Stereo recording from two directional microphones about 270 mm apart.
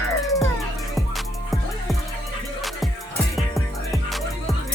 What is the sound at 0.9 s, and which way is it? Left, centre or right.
Music, centre.